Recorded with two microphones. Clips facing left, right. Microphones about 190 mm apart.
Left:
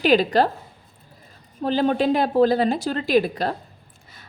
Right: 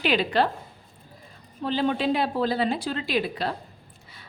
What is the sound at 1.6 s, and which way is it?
A woman's voice, 45° left (ahead or behind).